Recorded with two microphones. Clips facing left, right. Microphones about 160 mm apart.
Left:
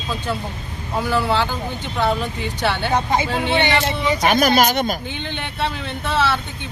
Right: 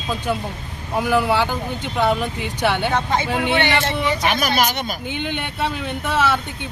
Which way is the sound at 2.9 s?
15° left (ahead or behind).